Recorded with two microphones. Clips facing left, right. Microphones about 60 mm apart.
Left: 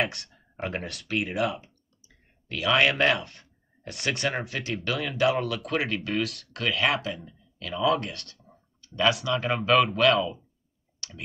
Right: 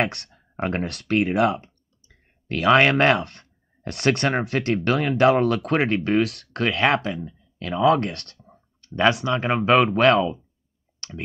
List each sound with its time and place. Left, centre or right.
0.0 s speech: right
8.5 s clicking: right
9.2 s speech: right
11.0 s clicking: right